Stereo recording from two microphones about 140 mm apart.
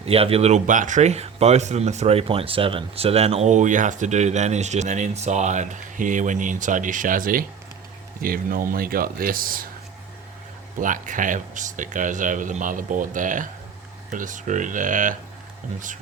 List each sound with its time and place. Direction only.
0.0 s speech: 45° right (ahead or behind); by 9.6 s 90° right
10.8 s speech: 70° right (ahead or behind)